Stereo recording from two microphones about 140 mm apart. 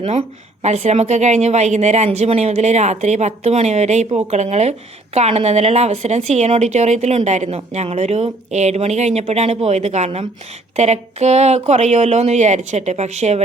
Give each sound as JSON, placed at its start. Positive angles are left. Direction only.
{"t": 0.0, "sound": "speech", "side_deg": -40}
{"t": 0.6, "sound": "a woman's voice", "side_deg": -55}